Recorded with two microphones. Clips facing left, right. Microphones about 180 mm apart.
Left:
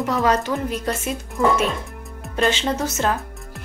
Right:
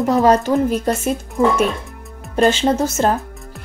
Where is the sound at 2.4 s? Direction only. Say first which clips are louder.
Right 6 dB; 45° right (ahead or behind).